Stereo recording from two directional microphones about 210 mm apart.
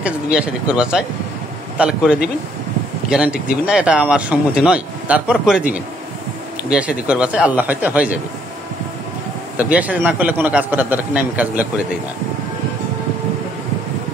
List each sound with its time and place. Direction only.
0.0 s speech: 5° right (ahead or behind)
6.7 s speech: 5° right (ahead or behind)
9.6 s speech: 5° right (ahead or behind)